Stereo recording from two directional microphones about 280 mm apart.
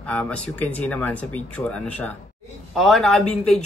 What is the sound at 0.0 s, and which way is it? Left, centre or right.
A man's voice, centre.